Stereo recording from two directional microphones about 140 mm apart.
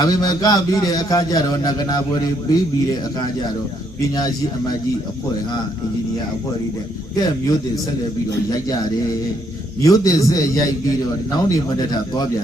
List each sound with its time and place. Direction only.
0.0 s a man's voice: 30° left (ahead or behind)
7.2 s a man's voice: 25° left (ahead or behind)